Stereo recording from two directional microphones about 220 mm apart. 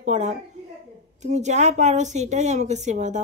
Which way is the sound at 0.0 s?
30° right (ahead or behind).